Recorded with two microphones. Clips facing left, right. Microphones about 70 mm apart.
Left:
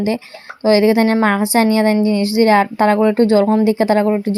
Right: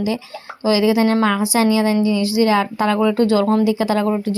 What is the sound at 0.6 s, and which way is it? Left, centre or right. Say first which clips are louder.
A woman's voice: left 4 dB; left.